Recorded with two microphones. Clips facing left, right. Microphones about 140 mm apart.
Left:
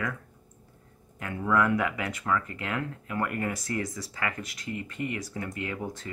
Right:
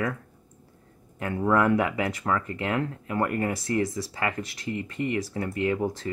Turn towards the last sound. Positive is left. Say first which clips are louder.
# right 8 dB
turn(degrees=-30)  # may be behind; listen again after turning